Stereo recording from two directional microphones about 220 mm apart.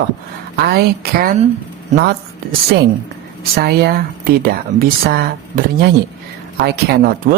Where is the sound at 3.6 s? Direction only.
45° right (ahead or behind).